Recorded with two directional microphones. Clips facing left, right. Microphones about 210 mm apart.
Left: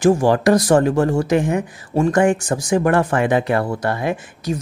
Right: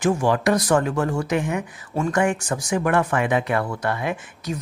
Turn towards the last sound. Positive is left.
turn(degrees=35)  # may be behind; listen again after turning